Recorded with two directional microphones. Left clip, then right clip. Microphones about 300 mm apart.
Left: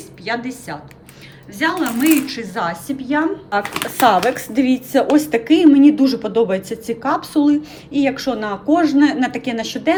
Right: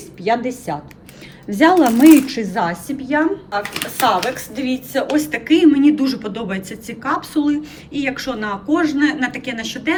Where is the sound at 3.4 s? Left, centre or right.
Left.